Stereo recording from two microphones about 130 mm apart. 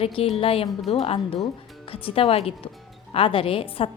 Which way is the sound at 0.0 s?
50° left (ahead or behind).